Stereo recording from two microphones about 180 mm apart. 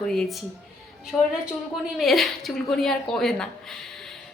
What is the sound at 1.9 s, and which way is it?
A woman's voice, centre (ahead or behind).